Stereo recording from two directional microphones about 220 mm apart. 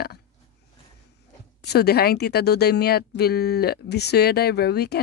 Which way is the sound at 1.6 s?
45° left (ahead or behind).